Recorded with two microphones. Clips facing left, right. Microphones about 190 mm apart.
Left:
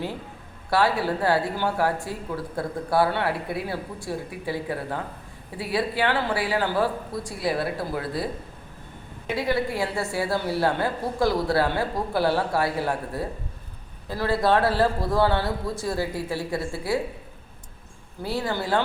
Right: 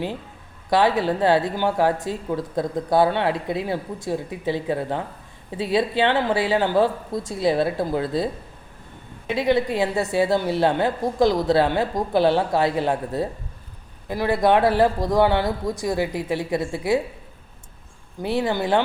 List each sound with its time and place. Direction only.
0.7 s speech: 20° right (ahead or behind)
9.3 s speech: 20° right (ahead or behind)
18.2 s speech: 20° right (ahead or behind)